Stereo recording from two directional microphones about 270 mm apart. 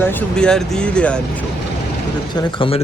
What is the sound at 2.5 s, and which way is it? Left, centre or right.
Speech, centre.